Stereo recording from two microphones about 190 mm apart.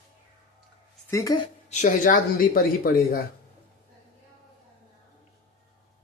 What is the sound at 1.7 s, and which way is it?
Speech, 40° left (ahead or behind).